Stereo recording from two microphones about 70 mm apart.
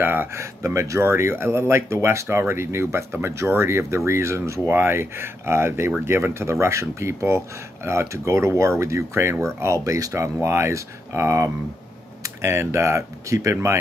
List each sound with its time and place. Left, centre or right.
0.0 s speech: right